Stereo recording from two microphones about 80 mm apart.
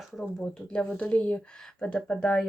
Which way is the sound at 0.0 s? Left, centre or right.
Centre.